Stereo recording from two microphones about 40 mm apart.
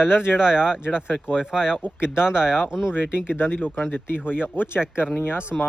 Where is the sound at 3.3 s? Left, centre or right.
Left.